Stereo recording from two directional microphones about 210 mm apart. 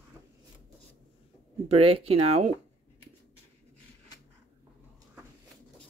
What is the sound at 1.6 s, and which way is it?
Speech, 30° right (ahead or behind).